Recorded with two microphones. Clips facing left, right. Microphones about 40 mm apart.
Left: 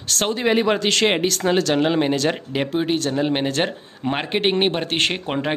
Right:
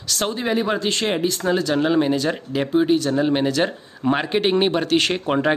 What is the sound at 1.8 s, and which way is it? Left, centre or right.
Speech, left.